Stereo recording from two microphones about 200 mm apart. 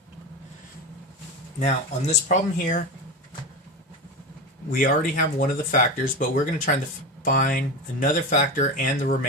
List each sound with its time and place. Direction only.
1.5 s speech: 35° left (ahead or behind)
4.7 s speech: 40° left (ahead or behind)